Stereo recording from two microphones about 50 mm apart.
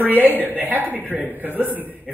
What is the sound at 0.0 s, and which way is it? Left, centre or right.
Speech, right.